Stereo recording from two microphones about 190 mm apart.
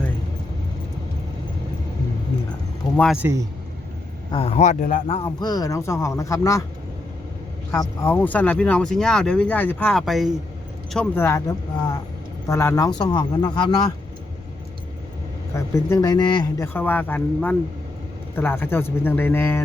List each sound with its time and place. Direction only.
2.9 s speech: 5° left (ahead or behind)
3.2 s a man's voice: 15° right (ahead or behind)
4.3 s speech: 30° left (ahead or behind)
5.4 s speech: 20° left (ahead or behind)
7.7 s speech: 10° left (ahead or behind)
15.5 s speech: 15° left (ahead or behind)
16.6 s speech: 10° left (ahead or behind)